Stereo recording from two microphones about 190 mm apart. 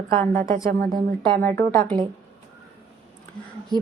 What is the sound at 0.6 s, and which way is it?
Speech, 50° right (ahead or behind).